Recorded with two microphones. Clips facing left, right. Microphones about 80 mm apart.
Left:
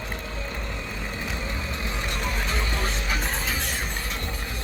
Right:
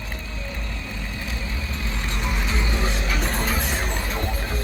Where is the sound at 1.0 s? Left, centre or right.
Centre.